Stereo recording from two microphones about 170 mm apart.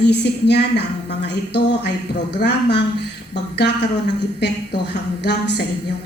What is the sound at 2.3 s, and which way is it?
A woman's voice, 75° left (ahead or behind).